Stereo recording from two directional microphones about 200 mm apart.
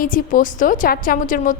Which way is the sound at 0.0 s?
45° left (ahead or behind).